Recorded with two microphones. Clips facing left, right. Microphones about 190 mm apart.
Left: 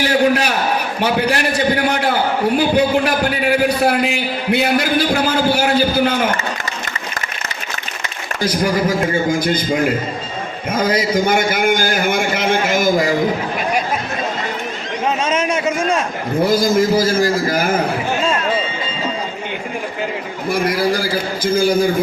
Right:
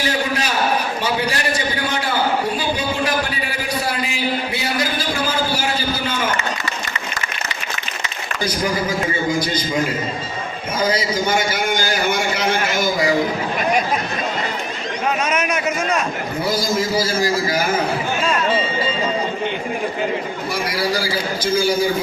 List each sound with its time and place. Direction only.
0.1 s a sound: 60° left (ahead or behind)
1.0 s a man's voice: 60° left (ahead or behind)
9.4 s a man's voice: 55° left (ahead or behind)
15.3 s a man's voice: 30° left (ahead or behind)
16.5 s a man's voice: 50° left (ahead or behind)
20.5 s a man's voice: 55° left (ahead or behind)